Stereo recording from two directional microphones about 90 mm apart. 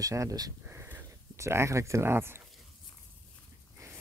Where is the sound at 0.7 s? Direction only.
25° right (ahead or behind).